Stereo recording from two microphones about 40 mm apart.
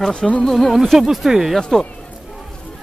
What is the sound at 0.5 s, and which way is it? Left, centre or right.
Speech, centre.